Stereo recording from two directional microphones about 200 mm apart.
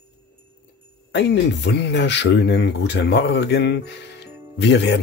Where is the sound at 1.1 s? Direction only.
60° left (ahead or behind).